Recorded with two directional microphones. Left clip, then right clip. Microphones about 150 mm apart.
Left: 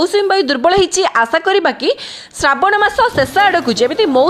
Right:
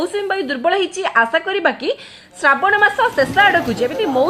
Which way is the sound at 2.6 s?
40° left (ahead or behind).